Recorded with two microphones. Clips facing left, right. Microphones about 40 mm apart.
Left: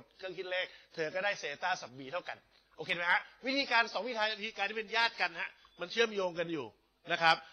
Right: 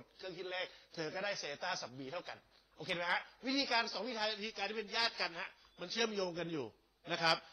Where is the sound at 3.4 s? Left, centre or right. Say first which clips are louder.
Left 3 dB; left.